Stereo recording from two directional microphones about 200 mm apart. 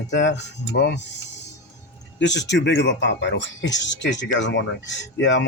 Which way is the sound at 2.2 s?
65° left (ahead or behind).